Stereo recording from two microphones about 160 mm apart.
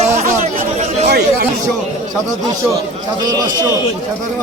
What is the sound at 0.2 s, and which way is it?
Chatter, 50° right (ahead or behind).